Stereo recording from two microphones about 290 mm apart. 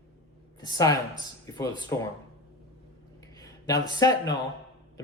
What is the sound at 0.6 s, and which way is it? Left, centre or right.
Speech, centre.